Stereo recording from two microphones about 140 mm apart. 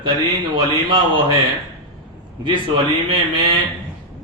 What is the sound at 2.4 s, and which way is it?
Speech, 35° right (ahead or behind).